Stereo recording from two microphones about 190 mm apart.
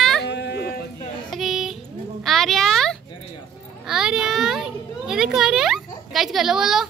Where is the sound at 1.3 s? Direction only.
Centre (ahead or behind).